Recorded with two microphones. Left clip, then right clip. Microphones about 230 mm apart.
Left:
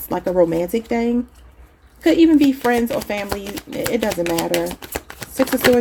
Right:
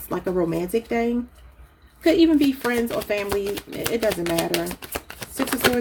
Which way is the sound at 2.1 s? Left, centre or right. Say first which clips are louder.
Left 4 dB; left.